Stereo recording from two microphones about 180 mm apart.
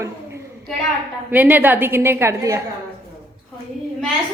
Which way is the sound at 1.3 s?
10° right (ahead or behind).